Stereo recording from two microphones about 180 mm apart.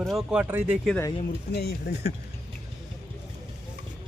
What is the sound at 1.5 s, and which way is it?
Speech, 65° left (ahead or behind).